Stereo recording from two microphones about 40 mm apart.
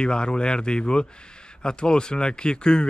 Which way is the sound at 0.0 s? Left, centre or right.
Left.